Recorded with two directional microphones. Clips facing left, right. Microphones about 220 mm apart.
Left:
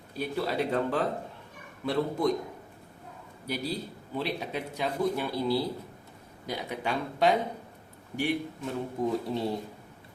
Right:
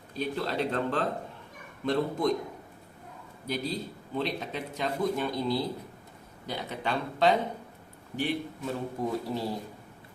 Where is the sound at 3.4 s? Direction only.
10° left (ahead or behind).